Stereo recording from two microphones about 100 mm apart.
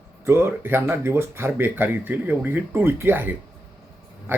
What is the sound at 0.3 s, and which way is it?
Speech, 20° right (ahead or behind).